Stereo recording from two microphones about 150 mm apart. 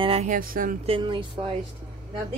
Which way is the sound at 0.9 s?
35° right (ahead or behind).